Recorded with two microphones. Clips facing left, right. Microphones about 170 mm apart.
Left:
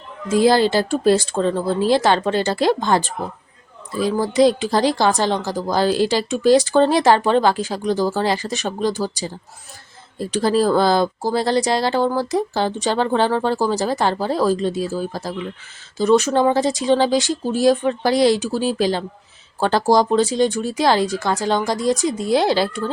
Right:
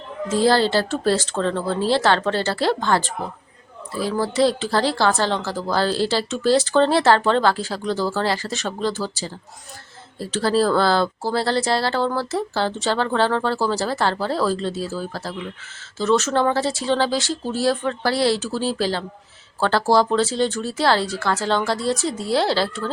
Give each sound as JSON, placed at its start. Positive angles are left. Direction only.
{"t": 0.3, "sound": "a woman's voice", "side_deg": 15}